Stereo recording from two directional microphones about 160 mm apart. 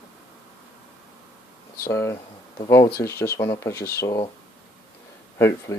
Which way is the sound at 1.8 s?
15° left (ahead or behind).